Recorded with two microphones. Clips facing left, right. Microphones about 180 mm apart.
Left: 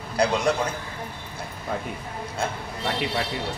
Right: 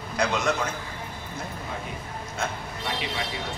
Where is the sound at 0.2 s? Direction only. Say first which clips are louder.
Left 3 dB; 30° left (ahead or behind).